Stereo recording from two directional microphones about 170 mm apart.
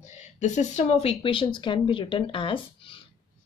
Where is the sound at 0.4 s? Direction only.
45° left (ahead or behind).